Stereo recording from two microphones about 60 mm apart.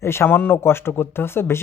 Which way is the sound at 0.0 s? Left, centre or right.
Left.